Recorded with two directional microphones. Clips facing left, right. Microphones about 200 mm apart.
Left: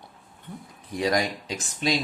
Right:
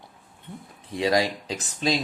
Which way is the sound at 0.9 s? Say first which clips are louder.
Right 2 dB; 25° right (ahead or behind).